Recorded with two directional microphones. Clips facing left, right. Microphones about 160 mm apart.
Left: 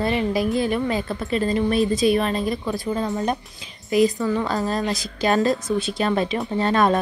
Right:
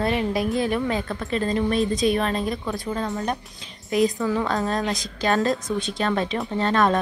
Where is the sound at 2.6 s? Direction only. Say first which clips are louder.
Left 3 dB; 20° left (ahead or behind).